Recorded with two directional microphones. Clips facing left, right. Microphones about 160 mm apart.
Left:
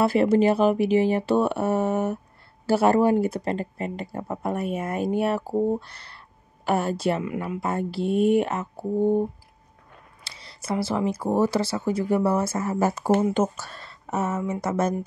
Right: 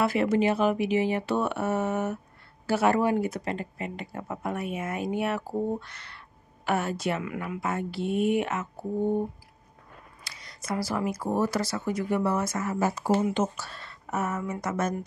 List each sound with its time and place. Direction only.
0.0 s speech: 35° left (ahead or behind)
10.2 s speech: 30° left (ahead or behind)
14.1 s speech: 25° left (ahead or behind)